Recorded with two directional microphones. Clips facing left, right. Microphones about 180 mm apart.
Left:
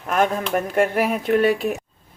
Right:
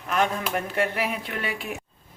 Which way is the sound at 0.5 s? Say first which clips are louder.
Left 7 dB; 45° left (ahead or behind).